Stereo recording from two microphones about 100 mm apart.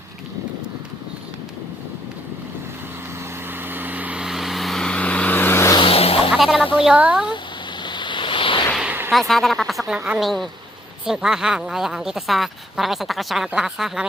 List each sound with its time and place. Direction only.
3.7 s vehicle: 20° right (ahead or behind); by 5.7 s 25° left (ahead or behind)
5.8 s vehicle: 70° left (ahead or behind)
6.3 s music: 5° right (ahead or behind)
6.7 s a woman's voice: 10° right (ahead or behind)
7.9 s waves: 50° left (ahead or behind)
8.9 s artillery fire: 15° right (ahead or behind)
9.1 s a woman's voice: centre (ahead or behind)